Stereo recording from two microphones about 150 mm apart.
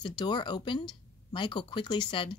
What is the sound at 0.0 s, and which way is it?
Speech, 30° left (ahead or behind).